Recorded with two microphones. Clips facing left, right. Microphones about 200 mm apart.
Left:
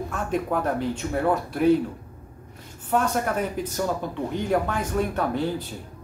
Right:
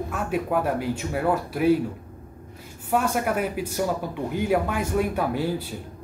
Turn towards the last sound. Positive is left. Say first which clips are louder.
# even
turn(degrees=-10)  # may be behind; listen again after turning